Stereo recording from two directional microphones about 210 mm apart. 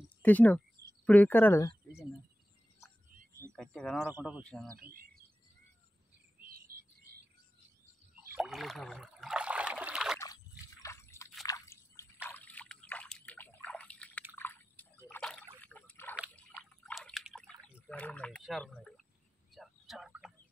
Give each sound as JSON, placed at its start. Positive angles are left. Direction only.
{"t": 0.2, "sound": "a woman's voice", "side_deg": 10}
{"t": 3.5, "sound": "speech", "side_deg": 5}
{"t": 4.4, "sound": "speech", "side_deg": 5}
{"t": 4.7, "sound": "speech", "side_deg": -45}
{"t": 6.7, "sound": "cricket", "side_deg": -45}
{"t": 8.4, "sound": "a sound", "side_deg": 0}
{"t": 10.1, "sound": "slosh", "side_deg": 15}
{"t": 10.8, "sound": "drip", "side_deg": 15}
{"t": 12.3, "sound": "trickle", "side_deg": 5}
{"t": 14.4, "sound": "a sound", "side_deg": 10}
{"t": 19.5, "sound": "turkey", "side_deg": 0}